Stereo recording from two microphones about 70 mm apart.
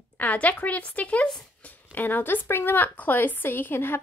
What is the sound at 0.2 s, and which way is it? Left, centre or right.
A woman's voice, left.